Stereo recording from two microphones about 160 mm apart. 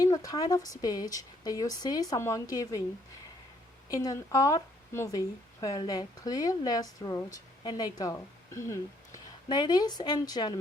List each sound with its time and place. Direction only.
0.0 s a woman's voice: 20° left (ahead or behind)
3.8 s a woman's voice: 20° left (ahead or behind)